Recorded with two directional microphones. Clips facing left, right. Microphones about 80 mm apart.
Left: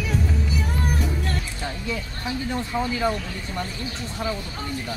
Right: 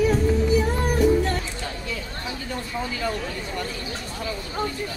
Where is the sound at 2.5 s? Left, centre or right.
Left.